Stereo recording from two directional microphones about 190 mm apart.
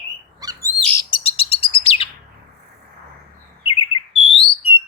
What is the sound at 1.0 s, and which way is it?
Bird, 30° left (ahead or behind).